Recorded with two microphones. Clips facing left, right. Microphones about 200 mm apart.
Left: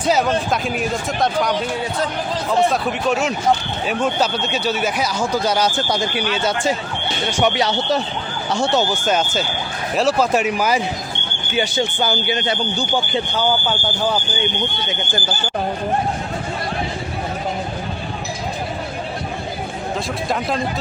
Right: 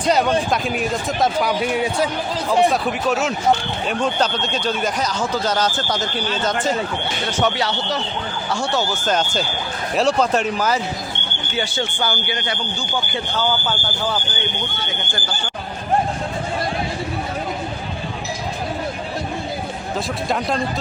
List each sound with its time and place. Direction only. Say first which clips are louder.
0.0 s speech: even; centre (ahead or behind)